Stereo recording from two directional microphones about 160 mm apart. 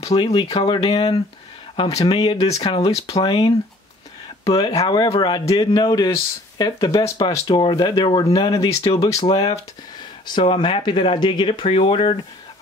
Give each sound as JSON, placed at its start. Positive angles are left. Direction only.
{"t": 0.0, "sound": "speech", "side_deg": 40}
{"t": 9.2, "sound": "speech", "side_deg": 35}